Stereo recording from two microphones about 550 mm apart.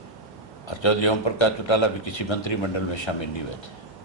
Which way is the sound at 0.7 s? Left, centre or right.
Left.